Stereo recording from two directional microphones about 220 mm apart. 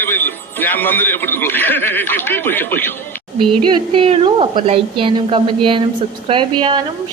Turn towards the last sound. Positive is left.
turn(degrees=-20)  # may be behind; listen again after turning